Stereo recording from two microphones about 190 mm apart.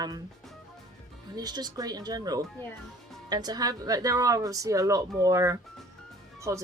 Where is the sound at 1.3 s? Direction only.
20° right (ahead or behind).